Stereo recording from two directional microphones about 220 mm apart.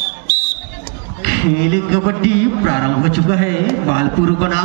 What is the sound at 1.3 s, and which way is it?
A man's voice, 50° left (ahead or behind).